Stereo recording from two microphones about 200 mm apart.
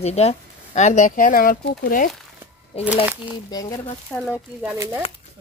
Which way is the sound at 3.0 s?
10° right (ahead or behind).